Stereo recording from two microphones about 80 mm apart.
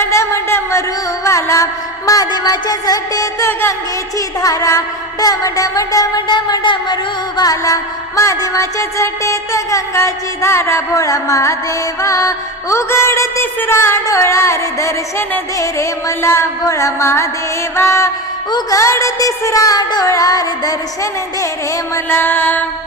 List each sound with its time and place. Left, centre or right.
0.0 s a sound: left
4.4 s music: left
6.2 s music: left
21.9 s music: left